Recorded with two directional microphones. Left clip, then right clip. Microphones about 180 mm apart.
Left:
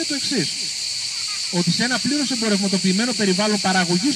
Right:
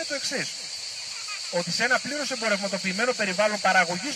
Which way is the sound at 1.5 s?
30° right (ahead or behind).